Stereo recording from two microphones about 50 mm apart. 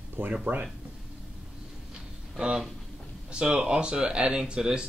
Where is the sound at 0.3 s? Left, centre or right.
Right.